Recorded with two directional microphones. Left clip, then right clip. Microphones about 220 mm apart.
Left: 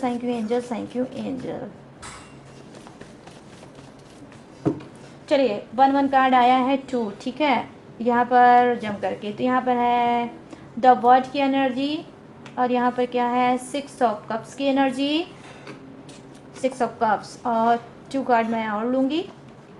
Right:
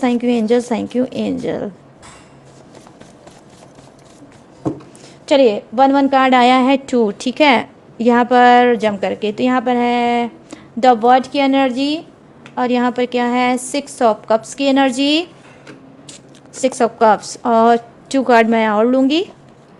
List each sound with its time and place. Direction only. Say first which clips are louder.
0.0 s a woman's voice: right 9 dB; 50° right (ahead or behind)
5.2 s a woman's voice: right 9 dB; 50° right (ahead or behind)
16.6 s a woman's voice: right 9 dB; 50° right (ahead or behind)